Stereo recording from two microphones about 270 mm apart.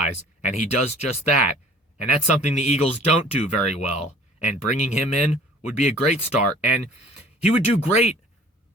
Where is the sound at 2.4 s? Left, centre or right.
Left.